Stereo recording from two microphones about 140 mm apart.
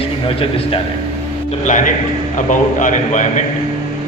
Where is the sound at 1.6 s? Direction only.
65° left (ahead or behind).